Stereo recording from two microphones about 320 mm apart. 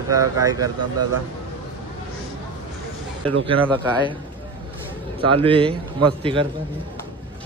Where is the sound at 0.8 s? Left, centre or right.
Right.